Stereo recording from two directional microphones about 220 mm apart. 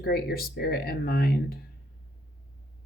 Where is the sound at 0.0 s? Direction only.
45° left (ahead or behind).